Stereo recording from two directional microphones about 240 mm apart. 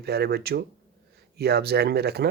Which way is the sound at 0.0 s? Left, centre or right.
Right.